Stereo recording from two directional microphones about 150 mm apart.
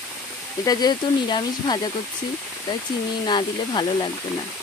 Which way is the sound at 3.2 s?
30° left (ahead or behind).